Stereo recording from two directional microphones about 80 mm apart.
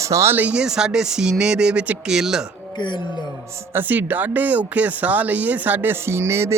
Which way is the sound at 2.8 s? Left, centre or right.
Left.